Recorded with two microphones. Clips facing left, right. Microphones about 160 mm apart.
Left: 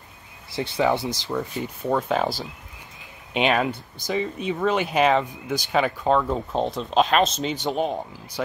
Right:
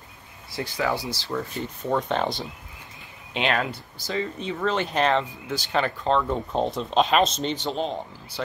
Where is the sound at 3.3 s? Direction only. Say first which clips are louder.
Left 4 dB; 15° left (ahead or behind); by 7.5 s centre (ahead or behind).